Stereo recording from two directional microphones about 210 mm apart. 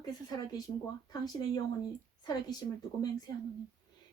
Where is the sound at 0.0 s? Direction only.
20° left (ahead or behind).